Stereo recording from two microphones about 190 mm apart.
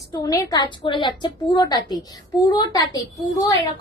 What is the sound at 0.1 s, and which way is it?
Speech, 20° left (ahead or behind).